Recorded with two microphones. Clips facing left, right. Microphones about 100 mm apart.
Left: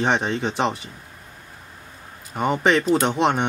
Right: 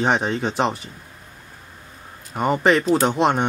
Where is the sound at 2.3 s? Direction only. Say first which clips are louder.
Right 1 dB; centre (ahead or behind).